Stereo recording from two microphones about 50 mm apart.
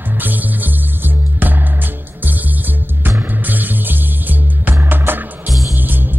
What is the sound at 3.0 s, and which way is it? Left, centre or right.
Music, right.